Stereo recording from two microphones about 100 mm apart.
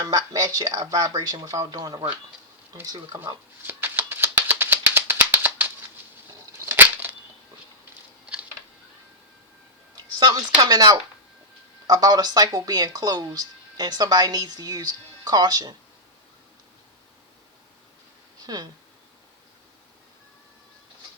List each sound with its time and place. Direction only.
0.0 s speech: 35° right (ahead or behind)
3.7 s rattle: 20° right (ahead or behind)
6.7 s a sound: 20° right (ahead or behind)
10.2 s speech: 40° right (ahead or behind)
18.4 s speech: 45° right (ahead or behind)